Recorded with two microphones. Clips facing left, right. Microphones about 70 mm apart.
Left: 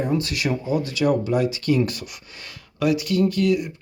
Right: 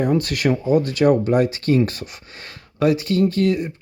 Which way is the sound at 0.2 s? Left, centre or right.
Right.